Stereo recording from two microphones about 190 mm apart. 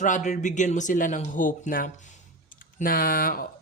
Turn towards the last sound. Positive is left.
turn(degrees=50)  # may be behind; listen again after turning